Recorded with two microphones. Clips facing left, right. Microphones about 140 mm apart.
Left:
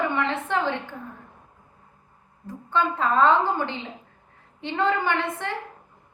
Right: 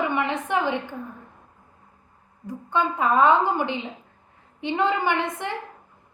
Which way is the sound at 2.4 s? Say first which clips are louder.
Even; 15° right (ahead or behind).